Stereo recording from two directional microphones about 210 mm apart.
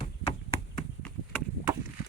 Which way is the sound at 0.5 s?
20° left (ahead or behind).